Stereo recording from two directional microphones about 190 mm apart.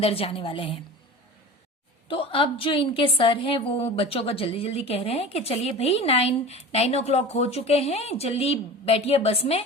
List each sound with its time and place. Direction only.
0.0 s a woman's voice: 30° left (ahead or behind)
2.0 s a woman's voice: 30° left (ahead or behind)